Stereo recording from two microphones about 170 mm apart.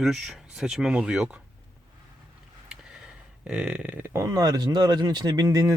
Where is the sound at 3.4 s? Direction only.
5° right (ahead or behind).